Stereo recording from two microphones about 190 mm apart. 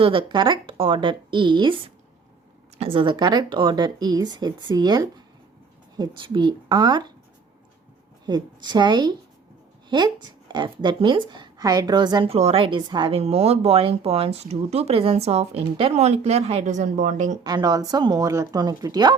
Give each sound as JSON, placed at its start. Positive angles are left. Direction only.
{"t": 0.0, "sound": "a woman's voice", "side_deg": -25}
{"t": 8.3, "sound": "a woman's voice", "side_deg": -20}
{"t": 17.4, "sound": "a woman's voice", "side_deg": -20}